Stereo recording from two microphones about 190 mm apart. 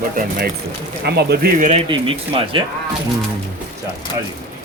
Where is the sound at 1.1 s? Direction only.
60° right (ahead or behind).